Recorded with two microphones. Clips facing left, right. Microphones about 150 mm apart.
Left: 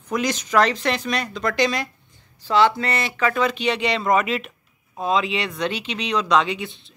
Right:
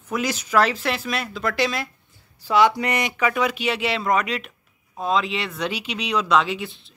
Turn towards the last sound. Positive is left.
turn(degrees=0)  # may be behind; listen again after turning